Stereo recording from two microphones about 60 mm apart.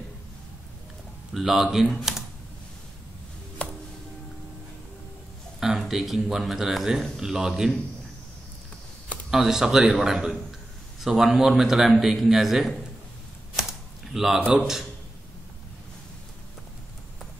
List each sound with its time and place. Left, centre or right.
1.3 s a man's voice: centre
3.6 s music: left
5.6 s speech: centre
9.3 s a man's voice: centre
13.6 s a sound: centre